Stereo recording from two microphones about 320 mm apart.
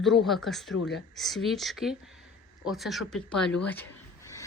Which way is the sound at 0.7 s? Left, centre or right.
Left.